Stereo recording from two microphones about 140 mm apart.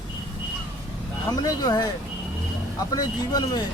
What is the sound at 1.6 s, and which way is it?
Speech, 25° left (ahead or behind).